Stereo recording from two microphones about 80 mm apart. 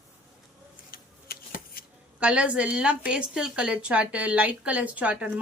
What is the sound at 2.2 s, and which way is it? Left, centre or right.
A woman's voice, centre.